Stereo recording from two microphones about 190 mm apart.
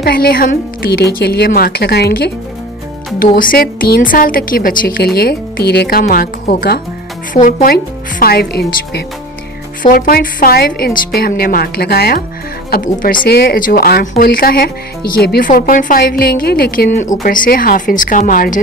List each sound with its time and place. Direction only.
0.0 s speech: 55° left (ahead or behind)
3.3 s a woman's voice: 50° left (ahead or behind)
7.3 s a woman's voice: 40° left (ahead or behind)
17.0 s a woman's voice: 45° left (ahead or behind)